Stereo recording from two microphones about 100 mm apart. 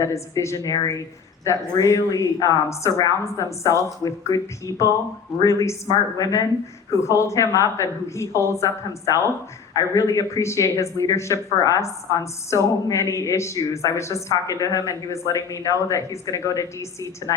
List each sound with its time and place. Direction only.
0.0 s a woman's voice: 30° left (ahead or behind)